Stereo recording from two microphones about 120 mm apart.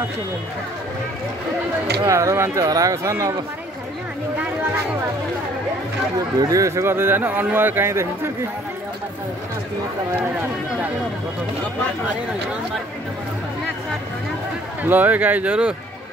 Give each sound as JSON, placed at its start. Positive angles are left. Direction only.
{"t": 2.0, "sound": "speech", "side_deg": -25}
{"t": 6.1, "sound": "speech", "side_deg": -30}
{"t": 14.8, "sound": "speech", "side_deg": -15}